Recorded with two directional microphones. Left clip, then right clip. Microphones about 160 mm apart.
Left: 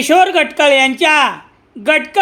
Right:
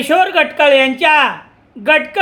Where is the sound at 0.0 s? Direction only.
25° left (ahead or behind).